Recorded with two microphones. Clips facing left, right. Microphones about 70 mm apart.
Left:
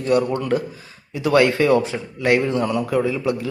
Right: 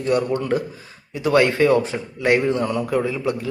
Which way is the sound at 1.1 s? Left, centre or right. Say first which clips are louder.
Left 1 dB; right.